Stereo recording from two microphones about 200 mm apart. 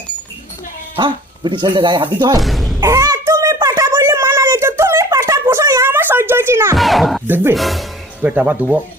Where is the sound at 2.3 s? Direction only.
Centre (ahead or behind).